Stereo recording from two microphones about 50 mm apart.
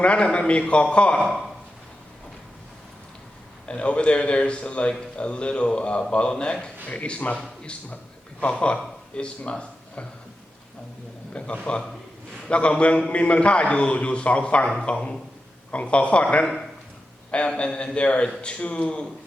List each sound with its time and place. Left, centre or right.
0.0 s a man's voice: left
3.7 s a man's voice: left
8.4 s speech: left
11.3 s a man's voice: left